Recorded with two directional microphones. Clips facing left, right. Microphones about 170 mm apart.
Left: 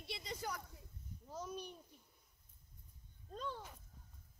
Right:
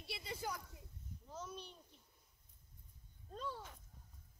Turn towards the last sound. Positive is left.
turn(degrees=-10)  # may be behind; listen again after turning